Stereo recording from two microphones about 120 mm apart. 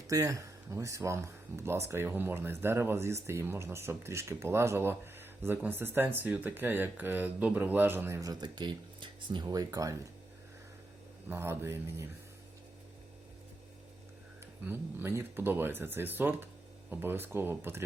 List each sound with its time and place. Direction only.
0.1 s speech: 25° right (ahead or behind)
11.3 s speech: 20° right (ahead or behind)
14.6 s speech: 15° right (ahead or behind)